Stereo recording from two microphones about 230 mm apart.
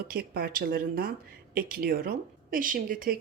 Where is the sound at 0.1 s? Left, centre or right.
Right.